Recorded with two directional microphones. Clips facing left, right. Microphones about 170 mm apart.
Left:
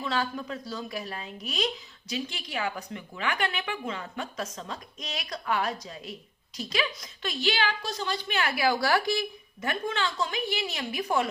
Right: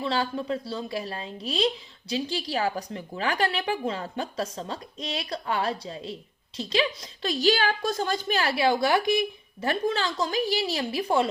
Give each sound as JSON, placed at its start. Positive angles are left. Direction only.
{"t": 0.0, "sound": "a woman's voice", "side_deg": -30}
{"t": 9.6, "sound": "a woman's voice", "side_deg": -35}